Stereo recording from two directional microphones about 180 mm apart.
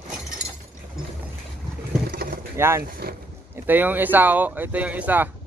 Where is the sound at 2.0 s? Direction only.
60° right (ahead or behind).